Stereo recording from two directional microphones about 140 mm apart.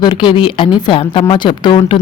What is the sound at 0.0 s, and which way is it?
Speech, 35° left (ahead or behind).